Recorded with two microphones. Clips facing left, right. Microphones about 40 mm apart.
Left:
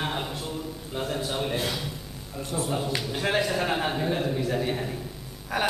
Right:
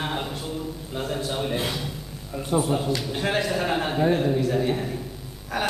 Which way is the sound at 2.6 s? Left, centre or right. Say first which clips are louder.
Right 3 dB; centre.